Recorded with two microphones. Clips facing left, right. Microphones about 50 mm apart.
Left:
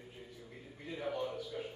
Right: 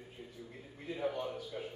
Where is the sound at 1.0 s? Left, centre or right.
Centre.